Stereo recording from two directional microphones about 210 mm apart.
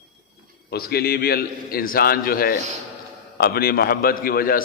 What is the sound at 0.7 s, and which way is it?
A man's voice, 50° left (ahead or behind).